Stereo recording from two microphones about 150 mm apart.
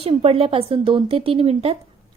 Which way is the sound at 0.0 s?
40° right (ahead or behind).